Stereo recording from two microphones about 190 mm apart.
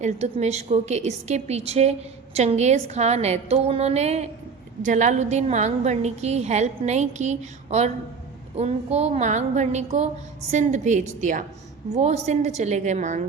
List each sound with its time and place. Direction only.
0.0 s a woman's voice: 35° right (ahead or behind)